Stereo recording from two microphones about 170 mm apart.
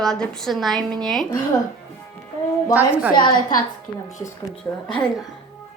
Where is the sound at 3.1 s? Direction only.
25° left (ahead or behind).